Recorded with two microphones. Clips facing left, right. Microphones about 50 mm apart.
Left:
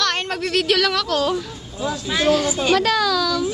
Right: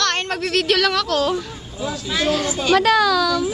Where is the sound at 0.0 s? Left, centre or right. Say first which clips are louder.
Right 1 dB; centre.